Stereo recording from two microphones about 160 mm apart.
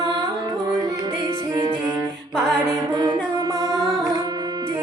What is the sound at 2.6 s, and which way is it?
A capella, 20° right (ahead or behind).